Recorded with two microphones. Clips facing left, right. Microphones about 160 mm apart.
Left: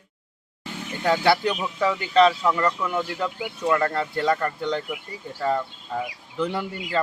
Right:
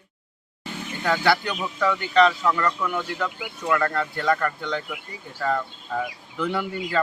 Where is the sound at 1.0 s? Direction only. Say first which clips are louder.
Left 2 dB; 30° left (ahead or behind).